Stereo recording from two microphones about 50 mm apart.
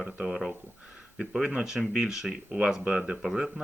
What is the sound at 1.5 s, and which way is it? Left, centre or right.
Speech, centre.